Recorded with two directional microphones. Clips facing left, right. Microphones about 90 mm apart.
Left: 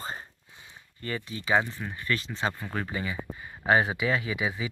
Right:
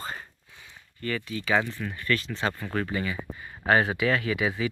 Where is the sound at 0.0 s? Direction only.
25° left (ahead or behind).